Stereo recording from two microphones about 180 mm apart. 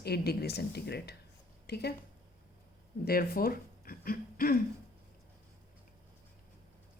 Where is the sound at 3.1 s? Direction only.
55° left (ahead or behind).